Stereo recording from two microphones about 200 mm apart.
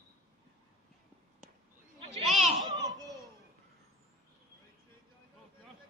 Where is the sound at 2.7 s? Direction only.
20° right (ahead or behind).